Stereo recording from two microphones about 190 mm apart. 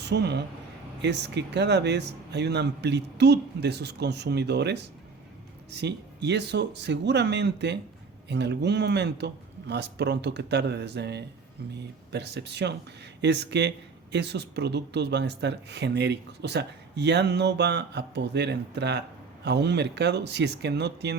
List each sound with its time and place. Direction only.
0.0 s speech: 60° right (ahead or behind)